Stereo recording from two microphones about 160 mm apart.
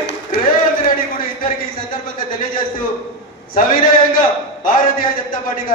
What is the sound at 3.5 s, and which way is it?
Speech, 60° left (ahead or behind).